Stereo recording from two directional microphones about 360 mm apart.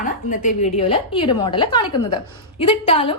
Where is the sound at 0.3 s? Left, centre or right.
Centre.